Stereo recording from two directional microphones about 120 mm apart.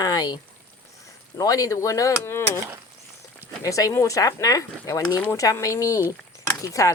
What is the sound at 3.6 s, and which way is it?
Speech, 30° left (ahead or behind).